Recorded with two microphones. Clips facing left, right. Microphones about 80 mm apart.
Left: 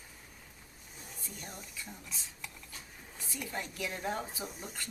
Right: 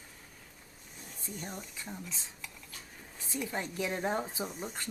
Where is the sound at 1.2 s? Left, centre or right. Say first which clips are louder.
Right 6 dB; right.